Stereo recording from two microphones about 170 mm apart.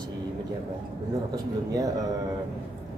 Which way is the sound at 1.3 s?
20° right (ahead or behind).